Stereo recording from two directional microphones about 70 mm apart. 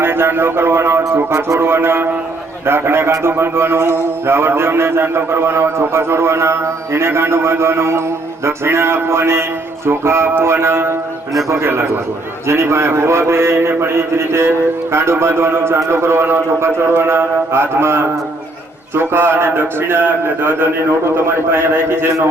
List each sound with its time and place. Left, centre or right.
0.0 s a man's voice: right